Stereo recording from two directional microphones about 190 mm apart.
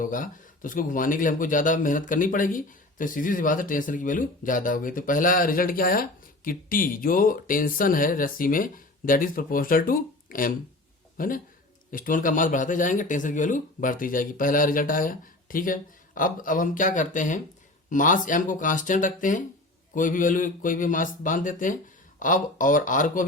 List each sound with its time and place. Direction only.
0.0 s speech: 45° left (ahead or behind)